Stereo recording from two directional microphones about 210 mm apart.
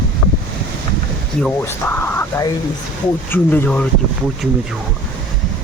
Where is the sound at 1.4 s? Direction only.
10° left (ahead or behind).